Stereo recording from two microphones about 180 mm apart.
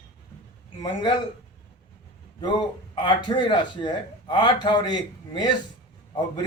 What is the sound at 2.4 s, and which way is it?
Speech, 25° left (ahead or behind).